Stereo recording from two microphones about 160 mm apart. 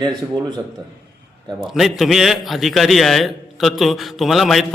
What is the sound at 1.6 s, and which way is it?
A man's voice, centre (ahead or behind).